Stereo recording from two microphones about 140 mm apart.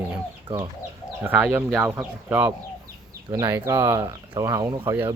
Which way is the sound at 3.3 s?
30° right (ahead or behind).